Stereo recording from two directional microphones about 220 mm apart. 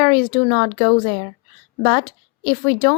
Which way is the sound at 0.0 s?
20° left (ahead or behind).